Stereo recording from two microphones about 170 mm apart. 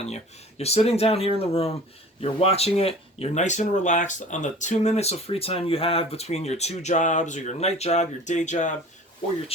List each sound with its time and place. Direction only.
0.6 s speech: 40° left (ahead or behind)